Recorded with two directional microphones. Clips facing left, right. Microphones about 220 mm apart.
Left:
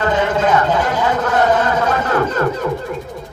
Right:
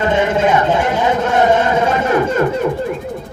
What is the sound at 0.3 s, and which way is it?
Speech, 25° right (ahead or behind).